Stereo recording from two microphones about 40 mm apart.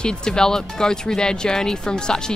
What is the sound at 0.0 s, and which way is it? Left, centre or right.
Speech, centre.